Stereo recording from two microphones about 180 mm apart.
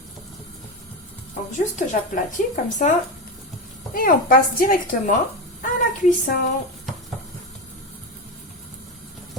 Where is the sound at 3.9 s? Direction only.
50° left (ahead or behind).